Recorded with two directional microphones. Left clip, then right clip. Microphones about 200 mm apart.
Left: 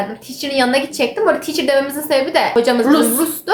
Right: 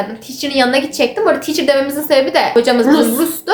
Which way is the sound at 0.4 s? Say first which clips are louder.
Right 2 dB; 15° right (ahead or behind).